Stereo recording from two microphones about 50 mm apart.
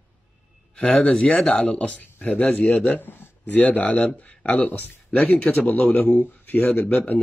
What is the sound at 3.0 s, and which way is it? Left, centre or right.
Speech, left.